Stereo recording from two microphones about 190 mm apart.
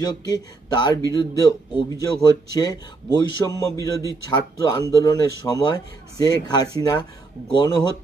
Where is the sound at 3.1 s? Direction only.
20° left (ahead or behind).